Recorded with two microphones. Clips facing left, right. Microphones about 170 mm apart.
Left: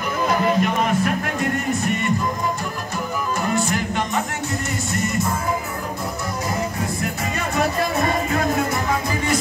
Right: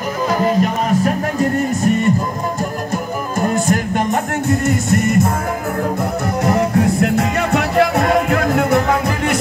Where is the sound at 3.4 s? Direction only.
50° right (ahead or behind).